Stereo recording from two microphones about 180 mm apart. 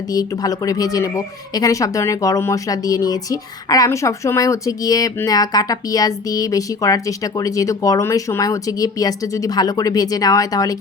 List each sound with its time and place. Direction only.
0.1 s speech: 20° left (ahead or behind)